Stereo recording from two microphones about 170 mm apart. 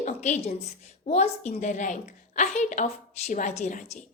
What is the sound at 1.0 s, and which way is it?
A woman's voice, 40° left (ahead or behind).